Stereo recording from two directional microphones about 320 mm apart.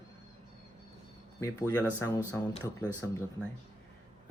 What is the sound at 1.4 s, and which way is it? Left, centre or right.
Speech, centre.